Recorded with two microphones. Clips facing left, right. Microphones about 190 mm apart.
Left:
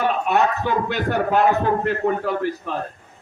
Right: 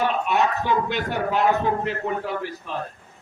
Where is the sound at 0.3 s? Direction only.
55° left (ahead or behind).